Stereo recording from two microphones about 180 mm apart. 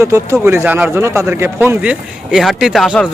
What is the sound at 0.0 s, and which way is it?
A man's voice, 15° right (ahead or behind).